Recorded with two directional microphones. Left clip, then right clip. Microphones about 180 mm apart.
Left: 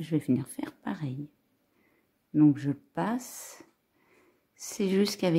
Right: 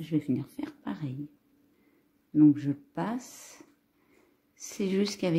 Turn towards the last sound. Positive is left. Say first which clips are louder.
# left 2 dB
turn(degrees=15)  # may be behind; listen again after turning